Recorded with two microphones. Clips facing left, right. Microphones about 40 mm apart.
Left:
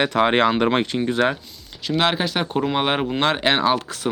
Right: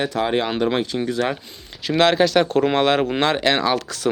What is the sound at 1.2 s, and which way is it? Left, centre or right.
Speech, left.